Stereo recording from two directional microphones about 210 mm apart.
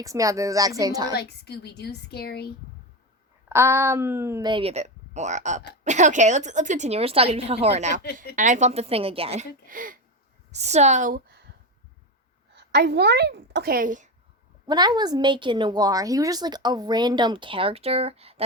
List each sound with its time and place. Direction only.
0.0 s speech: 15° right (ahead or behind)
1.1 s a woman's voice: 50° left (ahead or behind)
3.5 s a woman's voice: 10° right (ahead or behind); by 8.0 s 35° right (ahead or behind)
8.0 s a woman's voice: 50° left (ahead or behind)
8.4 s a woman's voice: 35° right (ahead or behind)
12.5 s a woman's voice: 55° right (ahead or behind); by 14.1 s 40° right (ahead or behind)
14.7 s a woman's voice: 20° right (ahead or behind)